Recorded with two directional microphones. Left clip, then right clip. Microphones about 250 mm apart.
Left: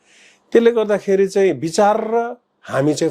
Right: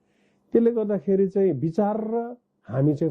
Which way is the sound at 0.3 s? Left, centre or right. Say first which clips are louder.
Left 8 dB; centre.